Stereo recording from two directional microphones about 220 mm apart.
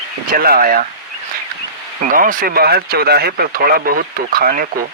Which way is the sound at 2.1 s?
40° right (ahead or behind).